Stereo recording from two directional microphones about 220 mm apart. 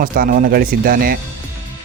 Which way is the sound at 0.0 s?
40° right (ahead or behind).